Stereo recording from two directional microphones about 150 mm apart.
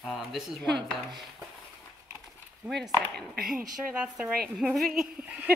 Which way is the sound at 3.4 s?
5° right (ahead or behind).